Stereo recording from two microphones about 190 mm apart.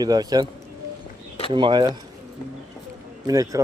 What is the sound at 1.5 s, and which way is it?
Speech, 25° right (ahead or behind).